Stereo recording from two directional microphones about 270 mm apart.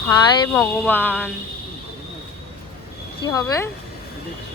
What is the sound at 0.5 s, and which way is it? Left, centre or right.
Speech, centre.